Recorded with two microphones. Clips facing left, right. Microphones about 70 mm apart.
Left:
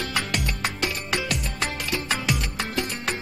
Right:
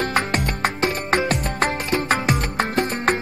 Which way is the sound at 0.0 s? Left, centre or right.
Right.